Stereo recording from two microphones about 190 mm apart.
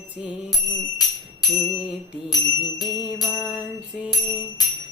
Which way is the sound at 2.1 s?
25° left (ahead or behind).